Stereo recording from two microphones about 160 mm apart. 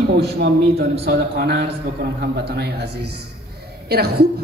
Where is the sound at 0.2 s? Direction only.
90° right.